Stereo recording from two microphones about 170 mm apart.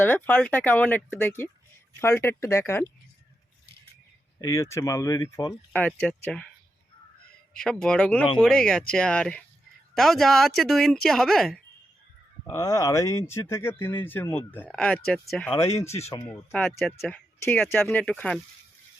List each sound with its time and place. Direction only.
0.0 s speech: 10° left (ahead or behind)
4.4 s speech: 20° left (ahead or behind)
5.7 s speech: 5° left (ahead or behind)
7.5 s speech: 5° left (ahead or behind)
12.5 s speech: 20° left (ahead or behind); by 15.5 s 5° left (ahead or behind)
16.0 s speech: 15° left (ahead or behind)
16.5 s speech: centre (ahead or behind)